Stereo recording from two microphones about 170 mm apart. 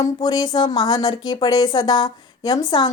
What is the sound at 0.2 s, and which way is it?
Speech, 25° left (ahead or behind).